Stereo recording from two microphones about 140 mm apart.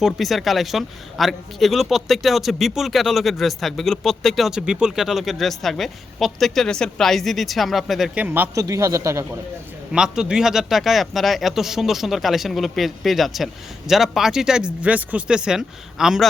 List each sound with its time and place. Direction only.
0.0 s speech: centre (ahead or behind)
8.5 s a man's voice: 25° right (ahead or behind)
9.9 s speech: 5° right (ahead or behind)